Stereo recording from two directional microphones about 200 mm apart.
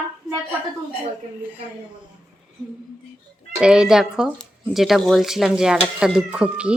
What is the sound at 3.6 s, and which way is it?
Speech, 5° right (ahead or behind).